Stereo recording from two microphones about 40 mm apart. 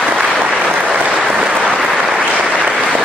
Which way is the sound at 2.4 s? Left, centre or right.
Right.